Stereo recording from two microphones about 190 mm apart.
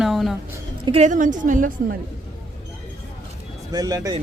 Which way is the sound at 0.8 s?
35° right (ahead or behind).